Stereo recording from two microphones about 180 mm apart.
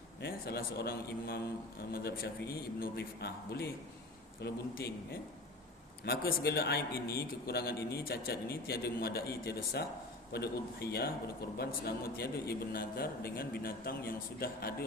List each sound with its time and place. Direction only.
0.2 s a man's voice: 60° left (ahead or behind)
6.1 s a man's voice: 65° left (ahead or behind)